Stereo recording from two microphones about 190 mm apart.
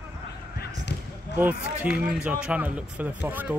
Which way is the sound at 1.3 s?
10° right (ahead or behind).